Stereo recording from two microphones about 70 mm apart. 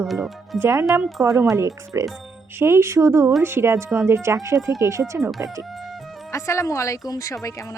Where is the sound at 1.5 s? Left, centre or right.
Right.